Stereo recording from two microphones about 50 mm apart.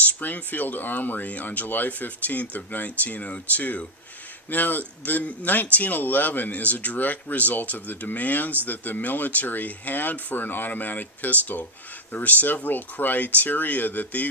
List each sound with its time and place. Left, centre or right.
0.2 s speech: left